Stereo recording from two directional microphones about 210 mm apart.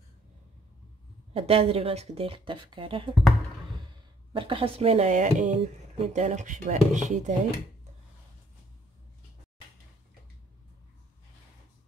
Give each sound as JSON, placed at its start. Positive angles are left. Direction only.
{"t": 1.3, "sound": "speech", "side_deg": -25}
{"t": 4.3, "sound": "speech", "side_deg": -25}